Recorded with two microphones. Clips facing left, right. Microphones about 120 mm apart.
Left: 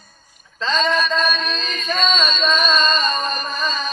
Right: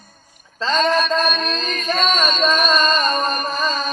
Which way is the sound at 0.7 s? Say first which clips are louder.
Right 2 dB; 50° right (ahead or behind).